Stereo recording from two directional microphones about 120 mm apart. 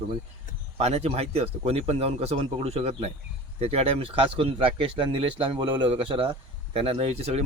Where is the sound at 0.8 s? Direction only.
60° right (ahead or behind).